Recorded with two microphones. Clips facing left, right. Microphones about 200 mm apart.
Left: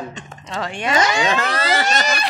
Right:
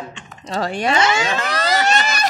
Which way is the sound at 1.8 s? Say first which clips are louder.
Right 1 dB; 40° left (ahead or behind).